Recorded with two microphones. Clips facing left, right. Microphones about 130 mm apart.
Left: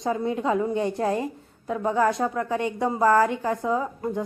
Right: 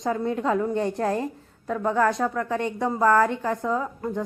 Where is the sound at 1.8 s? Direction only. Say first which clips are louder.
Even; 20° left (ahead or behind).